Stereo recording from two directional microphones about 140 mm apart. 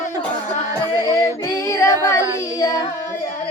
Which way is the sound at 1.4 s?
20° left (ahead or behind).